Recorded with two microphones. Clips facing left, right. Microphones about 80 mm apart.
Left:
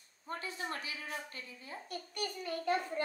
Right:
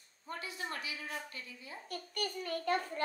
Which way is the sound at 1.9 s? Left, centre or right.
Right.